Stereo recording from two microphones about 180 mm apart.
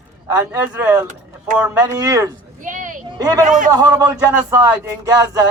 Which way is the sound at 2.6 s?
45° right (ahead or behind).